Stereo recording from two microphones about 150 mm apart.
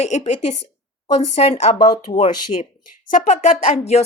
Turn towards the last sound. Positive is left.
turn(degrees=50)  # may be behind; listen again after turning